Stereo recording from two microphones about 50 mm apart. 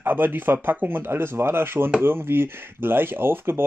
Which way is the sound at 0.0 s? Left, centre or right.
Right.